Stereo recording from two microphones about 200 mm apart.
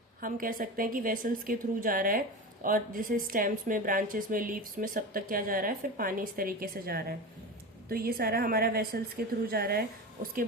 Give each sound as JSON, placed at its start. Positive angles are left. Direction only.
{"t": 0.2, "sound": "a woman's voice", "side_deg": -45}